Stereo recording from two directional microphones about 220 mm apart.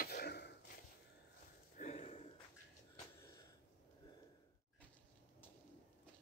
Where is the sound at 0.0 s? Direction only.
45° left (ahead or behind).